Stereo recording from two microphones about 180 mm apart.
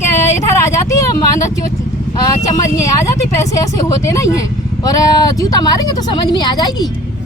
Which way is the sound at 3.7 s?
15° left (ahead or behind).